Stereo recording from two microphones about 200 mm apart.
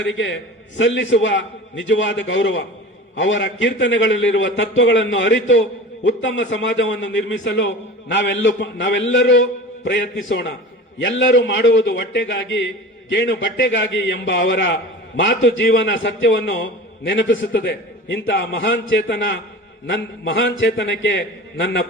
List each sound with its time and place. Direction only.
0.0 s a man's voice: 65° left (ahead or behind)